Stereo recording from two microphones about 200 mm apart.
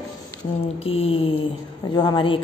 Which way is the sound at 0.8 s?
30° left (ahead or behind).